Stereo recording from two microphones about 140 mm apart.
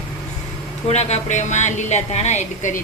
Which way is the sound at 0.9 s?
50° left (ahead or behind).